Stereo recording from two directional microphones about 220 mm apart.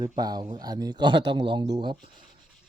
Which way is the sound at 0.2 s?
15° right (ahead or behind).